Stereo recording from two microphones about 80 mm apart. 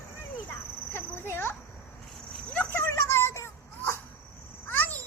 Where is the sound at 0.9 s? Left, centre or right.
Left.